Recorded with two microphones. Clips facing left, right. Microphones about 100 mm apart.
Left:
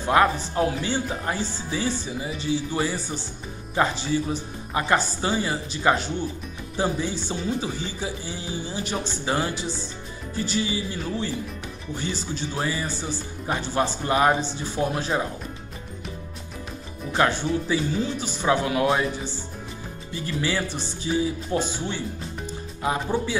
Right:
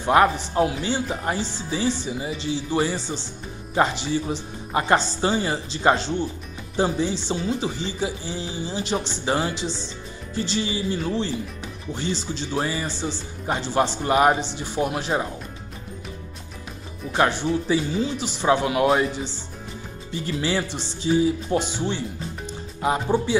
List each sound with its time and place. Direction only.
0.0 s speech: 20° right (ahead or behind)
17.2 s speech: 20° right (ahead or behind)
22.5 s music: 20° right (ahead or behind)